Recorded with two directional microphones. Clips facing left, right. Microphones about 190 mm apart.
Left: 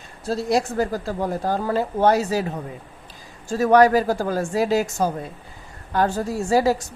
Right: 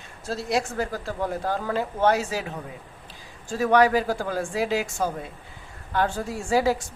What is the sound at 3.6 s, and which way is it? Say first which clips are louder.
A woman's voice: left 4 dB; 40° left (ahead or behind).